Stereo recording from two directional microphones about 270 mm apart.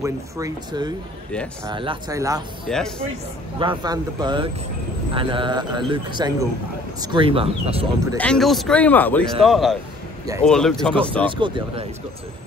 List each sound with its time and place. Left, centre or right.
0.0 s speech: centre
8.2 s speech: centre
11.2 s speech: centre